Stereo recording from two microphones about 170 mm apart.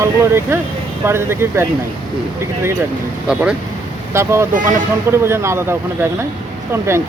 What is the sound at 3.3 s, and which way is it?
Speech, 5° right (ahead or behind).